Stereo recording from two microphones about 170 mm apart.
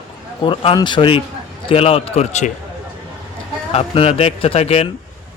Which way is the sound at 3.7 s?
35° left (ahead or behind).